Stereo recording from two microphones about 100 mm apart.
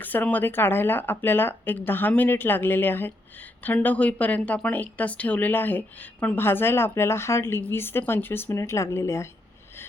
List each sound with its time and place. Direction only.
0.0 s speech: 20° left (ahead or behind)